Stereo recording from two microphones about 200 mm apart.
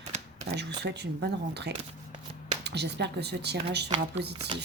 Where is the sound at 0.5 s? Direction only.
55° right (ahead or behind).